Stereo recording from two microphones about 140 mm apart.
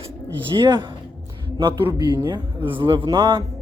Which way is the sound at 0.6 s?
35° right (ahead or behind).